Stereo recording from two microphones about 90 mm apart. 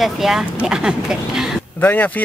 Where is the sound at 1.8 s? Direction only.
20° left (ahead or behind).